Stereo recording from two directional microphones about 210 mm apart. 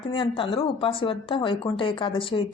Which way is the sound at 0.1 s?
25° left (ahead or behind).